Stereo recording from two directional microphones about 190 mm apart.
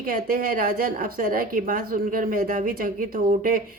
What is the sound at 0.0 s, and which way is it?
Speech, 50° right (ahead or behind).